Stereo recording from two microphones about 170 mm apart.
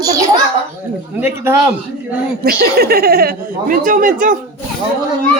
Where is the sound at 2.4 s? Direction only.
65° right (ahead or behind).